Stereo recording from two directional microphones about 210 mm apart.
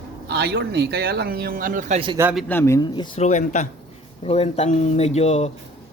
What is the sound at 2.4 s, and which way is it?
Speech, 10° left (ahead or behind).